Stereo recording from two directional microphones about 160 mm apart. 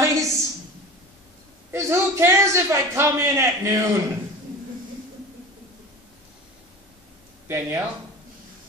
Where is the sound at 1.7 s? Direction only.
15° right (ahead or behind).